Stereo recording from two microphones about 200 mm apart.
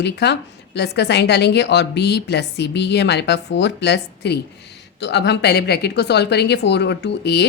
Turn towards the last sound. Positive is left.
turn(degrees=55)  # may be behind; listen again after turning